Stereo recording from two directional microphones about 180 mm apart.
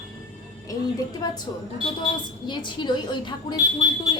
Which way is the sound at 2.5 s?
25° left (ahead or behind).